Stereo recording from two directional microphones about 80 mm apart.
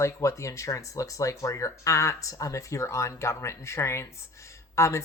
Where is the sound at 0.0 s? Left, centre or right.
Left.